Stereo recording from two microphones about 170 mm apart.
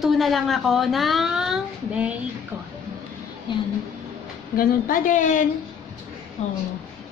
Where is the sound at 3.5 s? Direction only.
25° left (ahead or behind).